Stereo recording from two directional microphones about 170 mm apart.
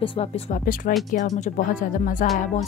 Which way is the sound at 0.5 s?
55° left (ahead or behind).